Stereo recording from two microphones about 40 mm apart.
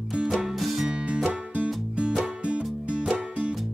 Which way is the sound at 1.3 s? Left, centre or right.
Right.